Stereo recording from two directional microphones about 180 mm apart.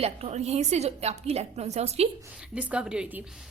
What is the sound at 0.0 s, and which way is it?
A woman's voice, 35° right (ahead or behind).